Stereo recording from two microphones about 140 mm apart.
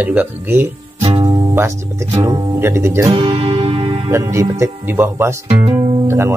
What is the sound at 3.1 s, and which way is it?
Music, 40° right (ahead or behind).